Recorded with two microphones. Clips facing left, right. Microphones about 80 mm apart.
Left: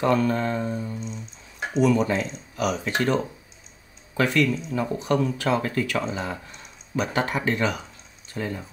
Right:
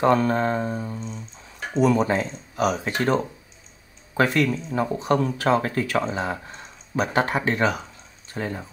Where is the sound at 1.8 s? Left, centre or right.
Right.